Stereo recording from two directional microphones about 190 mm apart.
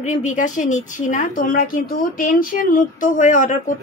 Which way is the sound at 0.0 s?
40° left (ahead or behind).